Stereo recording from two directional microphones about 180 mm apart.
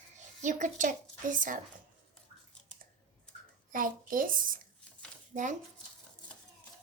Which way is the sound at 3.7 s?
50° right (ahead or behind).